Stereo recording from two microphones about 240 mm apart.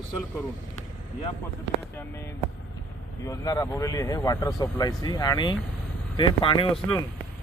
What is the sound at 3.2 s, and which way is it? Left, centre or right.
Speech, centre.